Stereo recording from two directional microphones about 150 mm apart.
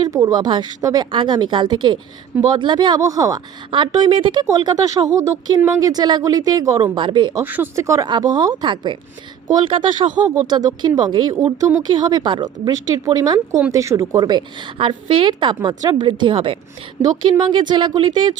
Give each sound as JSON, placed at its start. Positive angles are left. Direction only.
{"t": 0.1, "sound": "a woman's voice", "side_deg": -20}
{"t": 7.4, "sound": "a woman's voice", "side_deg": -15}